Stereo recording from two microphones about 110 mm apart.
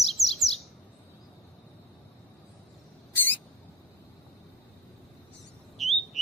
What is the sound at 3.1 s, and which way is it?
Rodents, 20° left (ahead or behind).